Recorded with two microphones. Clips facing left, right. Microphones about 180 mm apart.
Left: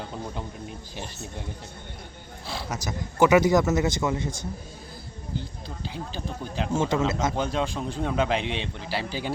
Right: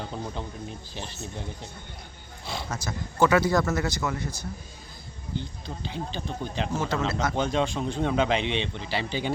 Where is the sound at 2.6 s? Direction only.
15° left (ahead or behind).